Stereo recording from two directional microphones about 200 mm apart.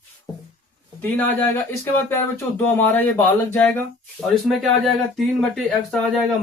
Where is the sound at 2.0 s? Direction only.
10° left (ahead or behind).